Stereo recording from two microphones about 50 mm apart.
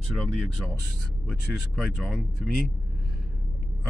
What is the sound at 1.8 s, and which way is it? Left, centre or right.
Speech, centre.